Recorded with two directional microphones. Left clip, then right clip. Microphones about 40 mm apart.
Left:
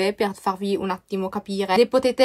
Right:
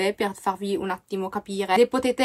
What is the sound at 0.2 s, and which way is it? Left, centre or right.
Speech, left.